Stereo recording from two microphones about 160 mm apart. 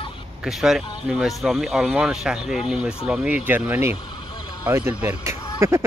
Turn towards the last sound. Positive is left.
turn(degrees=-15)  # may be behind; listen again after turning